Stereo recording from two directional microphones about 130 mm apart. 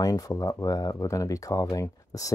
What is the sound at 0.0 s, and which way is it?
Speech, 25° left (ahead or behind).